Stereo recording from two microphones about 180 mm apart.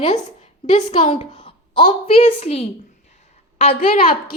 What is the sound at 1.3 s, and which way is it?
A woman's voice, 30° left (ahead or behind).